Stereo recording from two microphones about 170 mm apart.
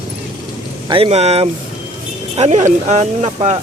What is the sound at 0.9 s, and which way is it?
Speech, 35° right (ahead or behind).